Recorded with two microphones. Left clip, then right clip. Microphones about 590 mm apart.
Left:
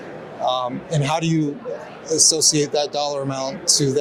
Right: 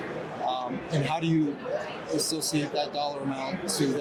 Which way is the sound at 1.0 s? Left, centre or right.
Left.